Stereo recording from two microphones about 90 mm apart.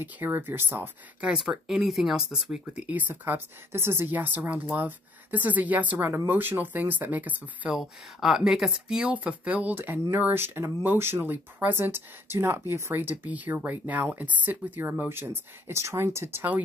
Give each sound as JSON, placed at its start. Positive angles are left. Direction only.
{"t": 0.0, "sound": "speech", "side_deg": -20}
{"t": 1.3, "sound": "speech", "side_deg": -5}
{"t": 2.6, "sound": "speech", "side_deg": -15}
{"t": 7.7, "sound": "speech", "side_deg": -5}